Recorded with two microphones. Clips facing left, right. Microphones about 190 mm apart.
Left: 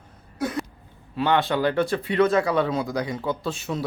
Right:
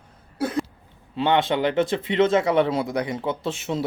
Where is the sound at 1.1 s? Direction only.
25° right (ahead or behind).